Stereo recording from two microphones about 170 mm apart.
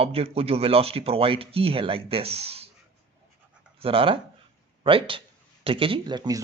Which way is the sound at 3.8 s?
30° right (ahead or behind).